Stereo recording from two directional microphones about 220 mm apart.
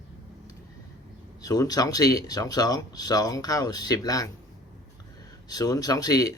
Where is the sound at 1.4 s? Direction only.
15° left (ahead or behind).